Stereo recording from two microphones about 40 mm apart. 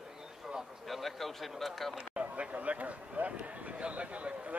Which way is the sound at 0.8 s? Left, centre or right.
Centre.